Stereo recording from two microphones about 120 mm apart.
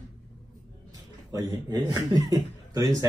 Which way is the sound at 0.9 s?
30° right (ahead or behind).